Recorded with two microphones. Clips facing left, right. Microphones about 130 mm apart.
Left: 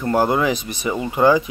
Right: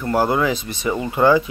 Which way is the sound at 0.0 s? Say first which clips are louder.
Left 1 dB; 20° left (ahead or behind).